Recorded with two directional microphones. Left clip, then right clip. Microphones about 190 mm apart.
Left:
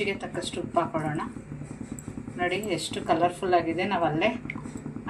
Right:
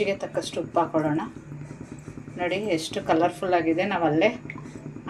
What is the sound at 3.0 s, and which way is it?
A woman's voice, 25° right (ahead or behind).